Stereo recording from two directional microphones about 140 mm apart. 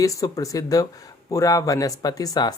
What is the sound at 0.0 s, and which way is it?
Speech, 25° left (ahead or behind).